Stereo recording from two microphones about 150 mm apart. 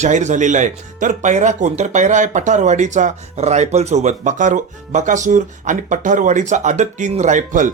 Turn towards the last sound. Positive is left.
turn(degrees=-60)  # may be behind; listen again after turning